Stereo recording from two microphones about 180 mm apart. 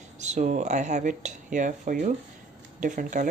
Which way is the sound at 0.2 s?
40° right (ahead or behind).